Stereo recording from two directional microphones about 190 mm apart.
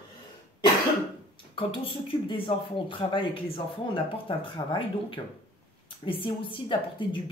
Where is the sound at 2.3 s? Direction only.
25° left (ahead or behind).